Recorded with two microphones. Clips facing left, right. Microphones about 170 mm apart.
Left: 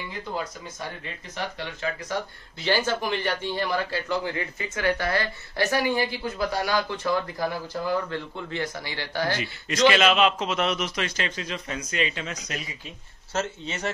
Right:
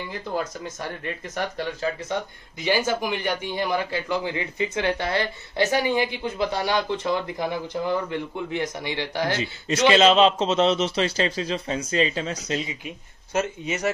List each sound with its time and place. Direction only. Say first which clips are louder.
1.0 s speech: right 7 dB; 50° right (ahead or behind)
2.6 s a man's voice: right 2 dB; 10° right (ahead or behind)
13.3 s a man's voice: right 4 dB; 10° right (ahead or behind)